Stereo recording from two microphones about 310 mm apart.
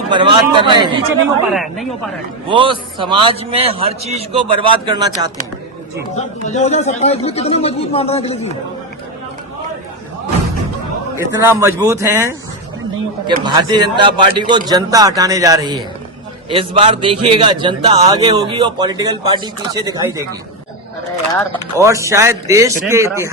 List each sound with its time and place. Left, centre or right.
0.1 s a man's voice: centre
1.5 s speech: centre
2.5 s a man's voice: centre
6.1 s speech: left
11.3 s a man's voice: centre
21.8 s a man's voice: centre